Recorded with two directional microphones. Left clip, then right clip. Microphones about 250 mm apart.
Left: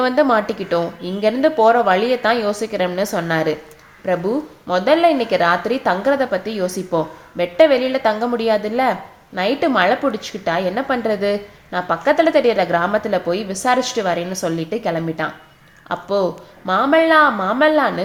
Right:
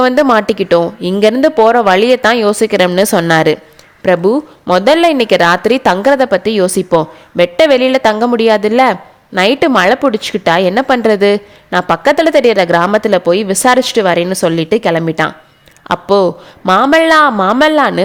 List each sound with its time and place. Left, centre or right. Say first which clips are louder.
0.0 s speech: right 6 dB; right